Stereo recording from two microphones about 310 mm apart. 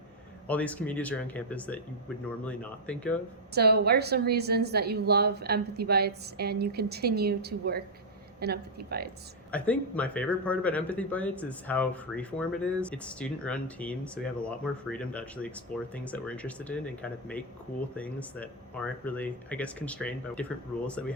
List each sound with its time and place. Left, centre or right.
0.4 s speech: centre
3.5 s a woman's voice: right
9.5 s speech: centre